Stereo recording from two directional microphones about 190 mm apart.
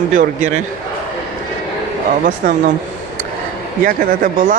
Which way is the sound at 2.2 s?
45° right (ahead or behind).